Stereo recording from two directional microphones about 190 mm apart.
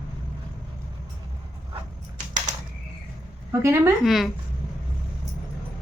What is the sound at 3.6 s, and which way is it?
Speech, 15° right (ahead or behind).